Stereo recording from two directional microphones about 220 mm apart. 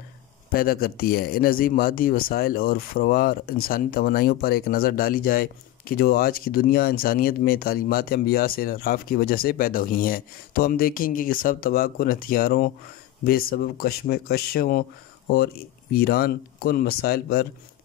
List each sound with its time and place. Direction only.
0.5 s speech: 40° left (ahead or behind)